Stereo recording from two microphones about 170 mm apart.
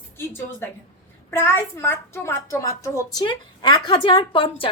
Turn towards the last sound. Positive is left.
turn(degrees=30)  # may be behind; listen again after turning